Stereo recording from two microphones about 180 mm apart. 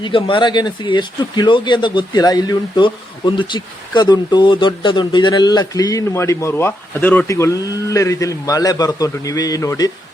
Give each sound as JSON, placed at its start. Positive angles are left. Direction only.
{"t": 0.0, "sound": "speech", "side_deg": 25}